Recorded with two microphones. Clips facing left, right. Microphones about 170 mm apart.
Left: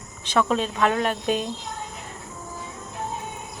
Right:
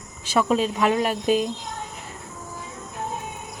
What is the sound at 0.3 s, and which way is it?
A woman's voice, 10° right (ahead or behind).